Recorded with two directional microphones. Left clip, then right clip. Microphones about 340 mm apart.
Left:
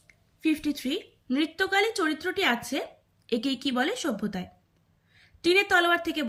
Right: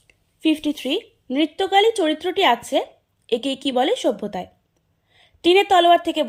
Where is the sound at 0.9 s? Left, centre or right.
Centre.